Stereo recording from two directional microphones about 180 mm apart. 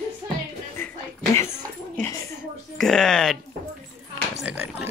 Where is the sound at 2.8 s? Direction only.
5° left (ahead or behind).